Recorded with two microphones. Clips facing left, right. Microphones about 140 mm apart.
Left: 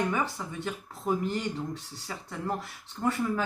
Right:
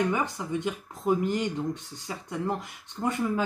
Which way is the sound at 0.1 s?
15° right (ahead or behind).